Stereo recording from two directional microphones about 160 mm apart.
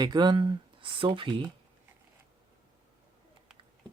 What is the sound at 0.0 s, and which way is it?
Speech, 25° right (ahead or behind).